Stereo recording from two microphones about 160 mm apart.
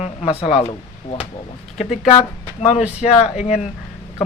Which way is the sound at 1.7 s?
Centre (ahead or behind).